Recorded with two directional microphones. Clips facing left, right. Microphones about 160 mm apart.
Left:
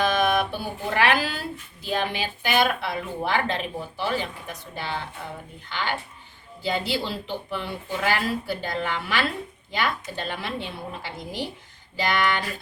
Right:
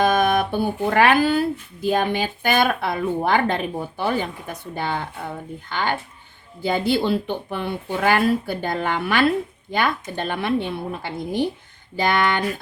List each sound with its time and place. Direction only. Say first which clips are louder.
0.0 s speech: right 4 dB; 50° right (ahead or behind)